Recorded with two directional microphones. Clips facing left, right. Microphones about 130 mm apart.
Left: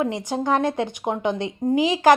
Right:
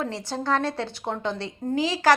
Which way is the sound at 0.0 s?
15° left (ahead or behind).